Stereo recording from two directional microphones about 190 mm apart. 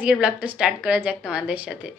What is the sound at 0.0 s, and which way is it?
A woman's voice, 5° right (ahead or behind).